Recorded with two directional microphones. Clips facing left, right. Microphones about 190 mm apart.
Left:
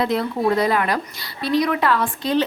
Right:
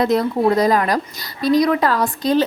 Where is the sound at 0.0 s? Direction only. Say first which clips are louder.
Right 4 dB; 40° right (ahead or behind).